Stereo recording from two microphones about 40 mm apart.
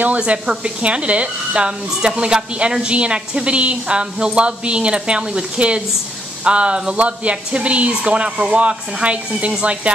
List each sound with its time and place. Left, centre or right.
0.2 s speech: right